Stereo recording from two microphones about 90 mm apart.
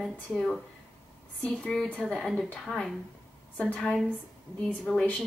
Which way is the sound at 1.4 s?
10° left (ahead or behind).